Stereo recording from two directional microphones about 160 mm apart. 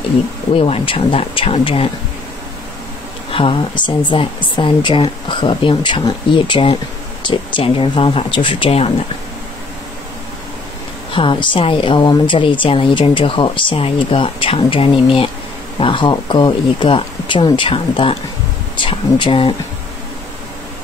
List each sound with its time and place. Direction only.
0.6 s a woman's voice: 35° left (ahead or behind)
3.3 s a woman's voice: 35° left (ahead or behind)
11.1 s a woman's voice: 30° left (ahead or behind)